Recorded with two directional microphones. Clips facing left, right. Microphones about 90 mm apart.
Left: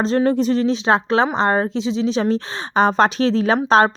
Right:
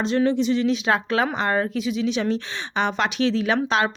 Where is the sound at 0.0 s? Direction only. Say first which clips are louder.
Left 3 dB; 35° left (ahead or behind).